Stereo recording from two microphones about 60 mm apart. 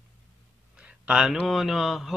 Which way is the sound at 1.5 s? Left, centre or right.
Centre.